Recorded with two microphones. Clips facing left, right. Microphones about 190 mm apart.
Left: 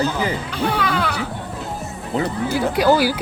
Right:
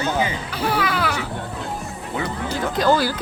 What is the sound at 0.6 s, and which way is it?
Speech, 5° right (ahead or behind).